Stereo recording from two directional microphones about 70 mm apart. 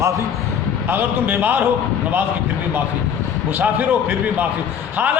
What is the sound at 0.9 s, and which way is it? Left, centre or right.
Speech, right.